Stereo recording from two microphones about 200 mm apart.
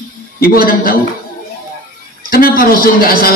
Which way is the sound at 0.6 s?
45° left (ahead or behind).